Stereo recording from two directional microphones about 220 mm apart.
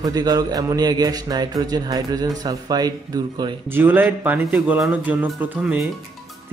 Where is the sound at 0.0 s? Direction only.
15° right (ahead or behind).